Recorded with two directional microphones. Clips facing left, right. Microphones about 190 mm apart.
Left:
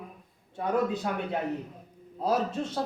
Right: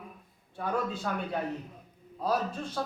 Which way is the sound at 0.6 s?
20° left (ahead or behind).